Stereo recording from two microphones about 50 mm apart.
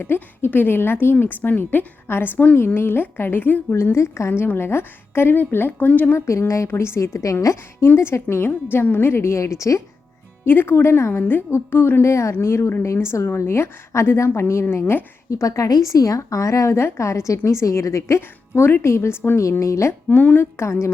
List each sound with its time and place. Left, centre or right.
0.0 s a woman's voice: left
1.2 s a woman's voice: left
3.9 s a woman's voice: left
4.3 s a woman's voice: left
6.1 s a woman's voice: left
6.7 s a woman's voice: left
7.4 s a woman's voice: left
10.4 s a woman's voice: left
12.0 s a woman's voice: left
15.3 s a woman's voice: left
19.4 s a woman's voice: left
20.1 s a woman's voice: left
20.4 s a woman's voice: left